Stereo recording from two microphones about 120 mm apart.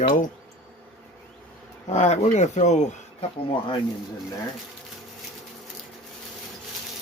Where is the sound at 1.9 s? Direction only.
70° left (ahead or behind).